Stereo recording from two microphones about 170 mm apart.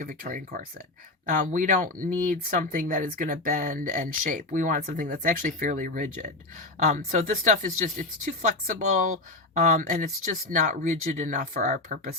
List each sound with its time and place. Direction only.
0.0 s speech: 55° right (ahead or behind)